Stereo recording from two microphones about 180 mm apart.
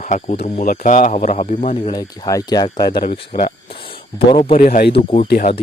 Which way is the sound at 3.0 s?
45° left (ahead or behind).